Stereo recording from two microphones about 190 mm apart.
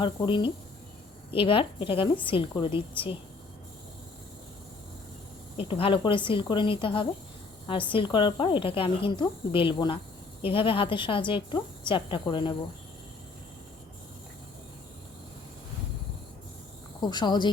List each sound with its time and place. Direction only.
0.0 s speech: 25° left (ahead or behind)
5.5 s speech: 30° left (ahead or behind)
17.0 s speech: 25° left (ahead or behind)